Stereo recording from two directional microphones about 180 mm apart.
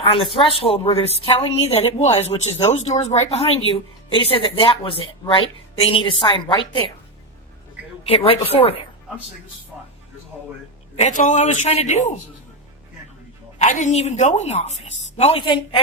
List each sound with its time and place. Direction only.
0.0 s a woman's voice: 30° left (ahead or behind)
8.0 s a woman's voice: 30° left (ahead or behind)
10.9 s a woman's voice: 40° left (ahead or behind)
13.6 s a woman's voice: 40° left (ahead or behind); by 15.8 s 25° left (ahead or behind)